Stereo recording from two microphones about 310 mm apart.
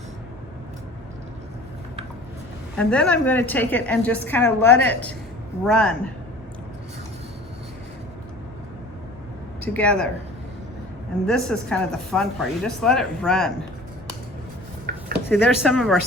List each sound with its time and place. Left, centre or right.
2.7 s a woman's voice: centre
9.6 s speech: centre
11.3 s a woman's voice: centre
14.9 s a sound: right
15.3 s a woman's voice: centre